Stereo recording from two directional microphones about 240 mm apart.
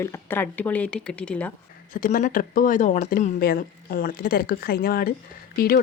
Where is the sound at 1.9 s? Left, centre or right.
Left.